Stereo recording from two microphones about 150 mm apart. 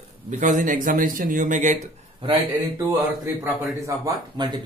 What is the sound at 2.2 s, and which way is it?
Speech, 35° right (ahead or behind).